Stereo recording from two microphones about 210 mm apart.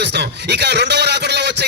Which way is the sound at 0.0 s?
55° right (ahead or behind).